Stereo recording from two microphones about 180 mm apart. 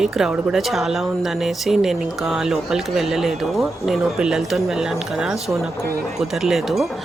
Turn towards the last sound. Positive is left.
turn(degrees=0)  # may be behind; listen again after turning